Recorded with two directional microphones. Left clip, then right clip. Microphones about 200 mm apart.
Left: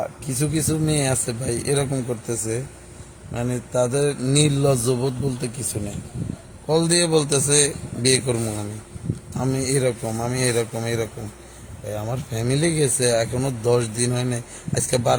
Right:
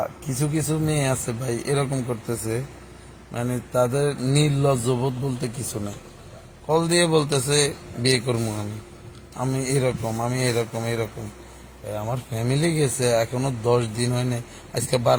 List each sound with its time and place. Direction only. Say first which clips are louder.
0.0 s speech: left 1 dB; 20° left (ahead or behind)